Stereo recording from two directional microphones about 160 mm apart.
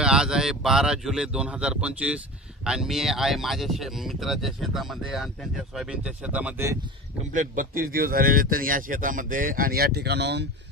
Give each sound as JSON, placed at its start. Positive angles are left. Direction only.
{"t": 0.0, "sound": "speech", "side_deg": -5}
{"t": 7.3, "sound": "a man's voice", "side_deg": -60}